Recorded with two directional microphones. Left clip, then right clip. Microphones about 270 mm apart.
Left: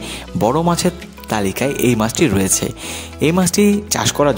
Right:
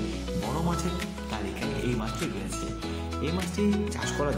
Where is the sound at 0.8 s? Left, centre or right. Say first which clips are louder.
Left 14 dB; left.